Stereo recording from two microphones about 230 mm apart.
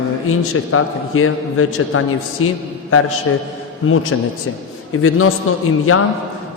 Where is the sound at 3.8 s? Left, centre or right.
Left.